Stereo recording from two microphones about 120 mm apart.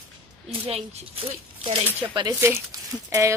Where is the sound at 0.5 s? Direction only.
55° right (ahead or behind).